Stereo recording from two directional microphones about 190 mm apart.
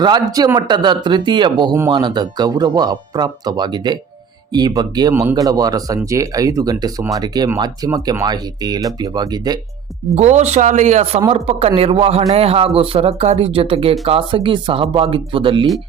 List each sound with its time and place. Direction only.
0.0 s speech: 20° right (ahead or behind)
10.2 s speech: 35° right (ahead or behind)